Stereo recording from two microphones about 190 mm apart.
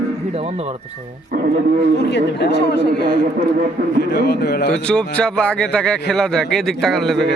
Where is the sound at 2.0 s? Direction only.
65° left (ahead or behind).